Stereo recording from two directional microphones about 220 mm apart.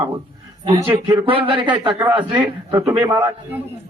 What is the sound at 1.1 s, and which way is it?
A man's voice, 25° right (ahead or behind).